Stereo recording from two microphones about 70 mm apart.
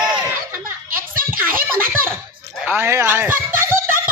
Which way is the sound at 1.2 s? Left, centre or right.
Right.